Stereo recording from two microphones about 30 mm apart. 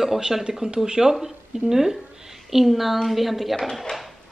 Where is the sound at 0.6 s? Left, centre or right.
Right.